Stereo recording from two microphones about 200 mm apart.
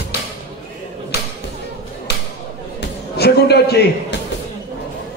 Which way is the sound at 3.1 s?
55° left (ahead or behind).